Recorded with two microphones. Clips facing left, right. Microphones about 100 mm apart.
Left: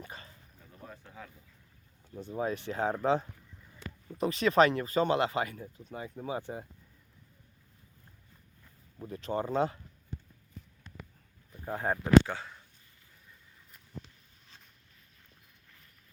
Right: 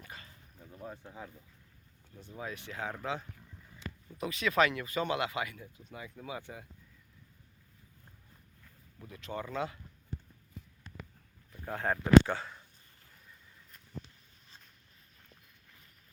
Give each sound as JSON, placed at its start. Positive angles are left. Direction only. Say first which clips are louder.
{"t": 0.0, "sound": "bow-wow", "louder": "left 4 dB", "side_deg": 30}
{"t": 0.8, "sound": "speech", "louder": "right 3 dB", "side_deg": -20}
{"t": 2.1, "sound": "speech", "louder": "left 9 dB", "side_deg": 35}
{"t": 3.8, "sound": "a sound", "louder": "even", "side_deg": 50}
{"t": 4.2, "sound": "speech", "louder": "left 5 dB", "side_deg": 35}
{"t": 9.0, "sound": "speech", "louder": "left 7 dB", "side_deg": 35}
{"t": 11.6, "sound": "speech", "louder": "left 1 dB", "side_deg": 15}
{"t": 12.2, "sound": "speech", "louder": "right 2 dB", "side_deg": 0}